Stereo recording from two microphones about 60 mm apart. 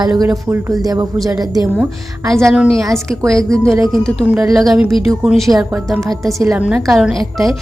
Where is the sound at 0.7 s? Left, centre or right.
Right.